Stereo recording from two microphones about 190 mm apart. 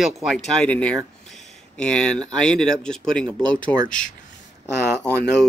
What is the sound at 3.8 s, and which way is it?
Speech, 45° left (ahead or behind).